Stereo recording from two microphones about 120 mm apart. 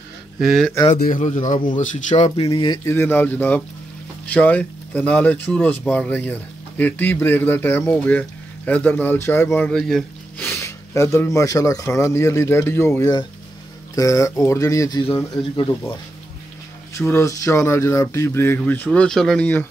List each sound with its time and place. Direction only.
0.4 s speech: centre (ahead or behind)
1.8 s speech: 80° left
2.3 s speech: 50° left (ahead or behind)
2.8 s speech: 20° left (ahead or behind)
9.7 s speech: 5° left (ahead or behind)
10.4 s speech: 20° left (ahead or behind)
17.0 s speech: 20° left (ahead or behind)
18.9 s speech: 5° left (ahead or behind)